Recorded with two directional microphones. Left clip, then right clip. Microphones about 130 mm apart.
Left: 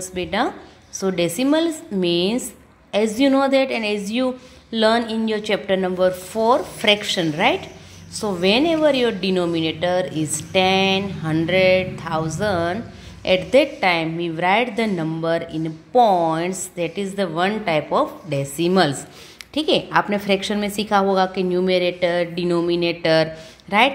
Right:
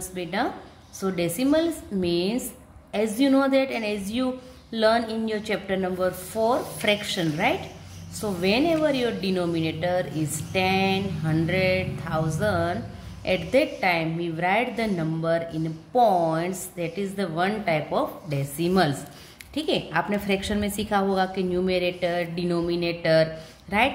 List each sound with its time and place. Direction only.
0.0 s a woman's voice: 30° left (ahead or behind)